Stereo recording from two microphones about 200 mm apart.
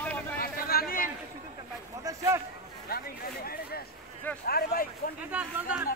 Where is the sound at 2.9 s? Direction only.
50° left (ahead or behind).